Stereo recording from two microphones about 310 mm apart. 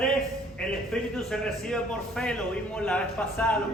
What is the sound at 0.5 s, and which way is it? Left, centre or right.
A man's voice, centre.